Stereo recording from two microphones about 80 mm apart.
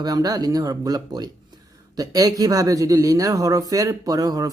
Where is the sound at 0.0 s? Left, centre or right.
Right.